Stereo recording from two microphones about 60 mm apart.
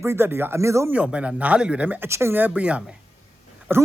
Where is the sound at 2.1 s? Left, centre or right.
Right.